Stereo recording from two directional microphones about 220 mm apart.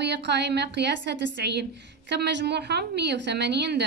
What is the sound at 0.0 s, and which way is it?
A woman's voice, 50° right (ahead or behind).